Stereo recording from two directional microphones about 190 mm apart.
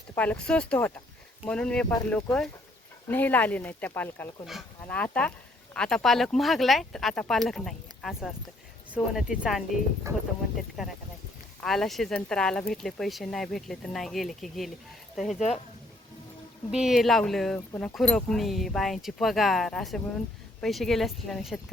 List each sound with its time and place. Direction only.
0.2 s speech: 5° left (ahead or behind)
11.6 s speech: centre (ahead or behind)
15.4 s speech: 35° left (ahead or behind)
16.7 s speech: centre (ahead or behind)